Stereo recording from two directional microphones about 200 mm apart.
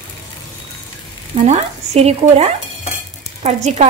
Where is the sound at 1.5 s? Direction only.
35° right (ahead or behind).